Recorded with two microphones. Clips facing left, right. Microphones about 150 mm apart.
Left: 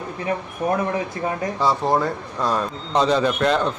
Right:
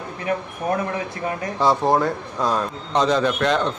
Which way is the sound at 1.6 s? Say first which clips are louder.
Right 2 dB; 15° right (ahead or behind).